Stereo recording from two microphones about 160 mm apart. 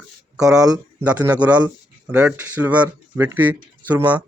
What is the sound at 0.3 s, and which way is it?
Speech, 5° right (ahead or behind).